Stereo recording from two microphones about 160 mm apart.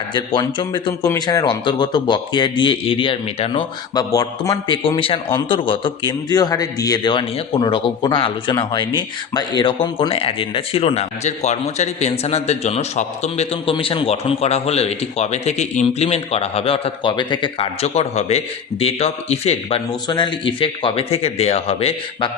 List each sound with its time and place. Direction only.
0.3 s a man's voice: 25° left (ahead or behind)
19.9 s a man's voice: 30° left (ahead or behind)